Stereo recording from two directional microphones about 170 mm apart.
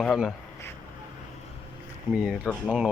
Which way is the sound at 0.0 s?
Centre (ahead or behind).